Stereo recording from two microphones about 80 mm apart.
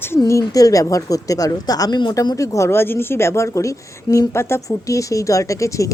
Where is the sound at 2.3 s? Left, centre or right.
Left.